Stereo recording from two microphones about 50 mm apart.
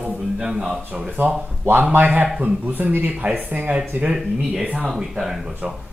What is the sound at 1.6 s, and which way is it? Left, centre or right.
A man's voice, right.